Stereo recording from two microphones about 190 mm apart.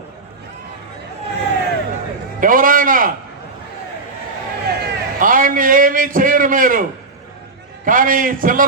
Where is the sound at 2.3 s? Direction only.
45° right (ahead or behind).